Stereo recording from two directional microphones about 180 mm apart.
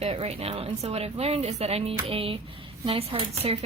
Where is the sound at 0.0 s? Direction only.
35° right (ahead or behind).